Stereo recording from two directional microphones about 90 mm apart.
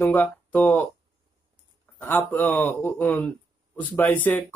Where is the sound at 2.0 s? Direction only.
20° left (ahead or behind).